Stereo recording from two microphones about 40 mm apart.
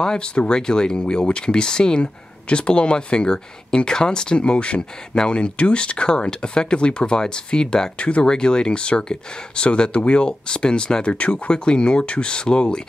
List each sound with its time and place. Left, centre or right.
0.0 s speech: left